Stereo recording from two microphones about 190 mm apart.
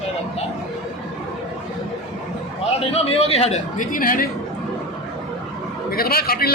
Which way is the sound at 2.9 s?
35° left (ahead or behind).